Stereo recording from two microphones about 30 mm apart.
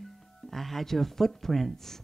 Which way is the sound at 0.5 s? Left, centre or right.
Centre.